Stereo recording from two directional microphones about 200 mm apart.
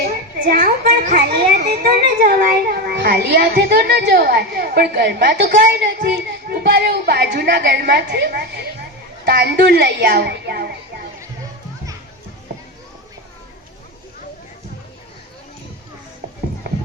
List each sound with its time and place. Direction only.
0.3 s a child's voice: 45° right (ahead or behind)